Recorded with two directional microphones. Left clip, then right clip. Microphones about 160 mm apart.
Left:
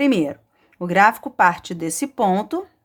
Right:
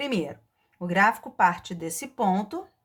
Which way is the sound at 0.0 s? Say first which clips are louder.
Left 10 dB; 30° left (ahead or behind).